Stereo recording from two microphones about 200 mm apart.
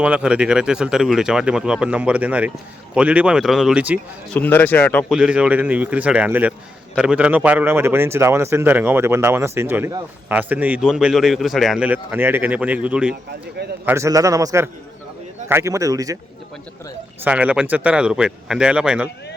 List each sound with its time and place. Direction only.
0.0 s speech: 5° right (ahead or behind)
4.3 s speech: 10° left (ahead or behind)
5.1 s a man's voice: 5° right (ahead or behind)
17.2 s speech: 5° right (ahead or behind)